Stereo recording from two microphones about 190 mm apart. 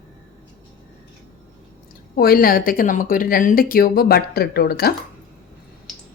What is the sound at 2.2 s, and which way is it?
Speech, 50° left (ahead or behind).